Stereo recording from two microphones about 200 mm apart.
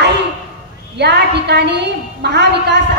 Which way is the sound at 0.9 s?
55° right (ahead or behind).